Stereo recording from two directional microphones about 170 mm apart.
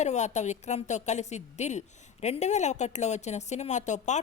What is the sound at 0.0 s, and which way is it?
Speech, 45° left (ahead or behind).